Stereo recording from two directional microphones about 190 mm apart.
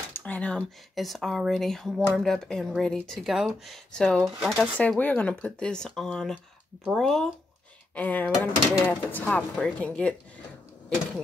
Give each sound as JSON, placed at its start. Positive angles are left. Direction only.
{"t": 0.1, "sound": "speech", "side_deg": 10}